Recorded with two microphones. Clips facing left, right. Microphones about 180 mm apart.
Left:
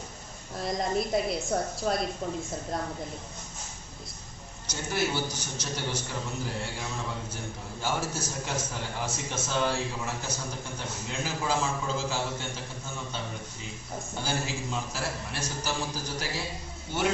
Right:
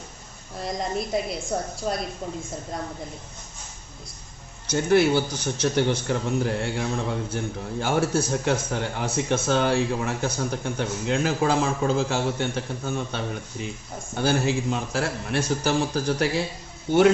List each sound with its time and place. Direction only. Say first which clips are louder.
0.6 s a woman's voice: right 1 dB; centre (ahead or behind)
4.7 s a man's voice: right 11 dB; 60° right (ahead or behind)